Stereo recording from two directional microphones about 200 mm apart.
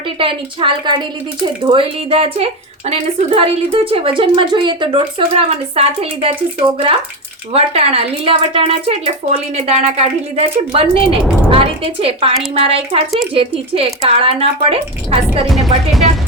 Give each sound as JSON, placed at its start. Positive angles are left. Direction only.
{"t": 0.2, "sound": "speech", "side_deg": -25}
{"t": 7.5, "sound": "speech", "side_deg": -30}
{"t": 15.5, "sound": "speech", "side_deg": 0}